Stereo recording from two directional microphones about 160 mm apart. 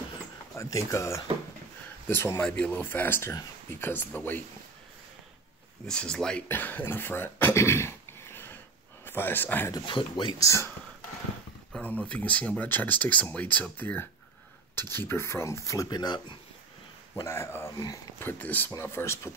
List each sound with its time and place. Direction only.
0.6 s speech: 20° left (ahead or behind)
5.9 s speech: 5° left (ahead or behind)
9.8 s speech: 30° left (ahead or behind)
11.7 s speech: 10° left (ahead or behind)